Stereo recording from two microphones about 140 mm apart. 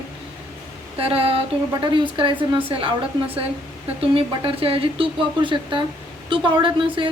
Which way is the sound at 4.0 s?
40° right (ahead or behind).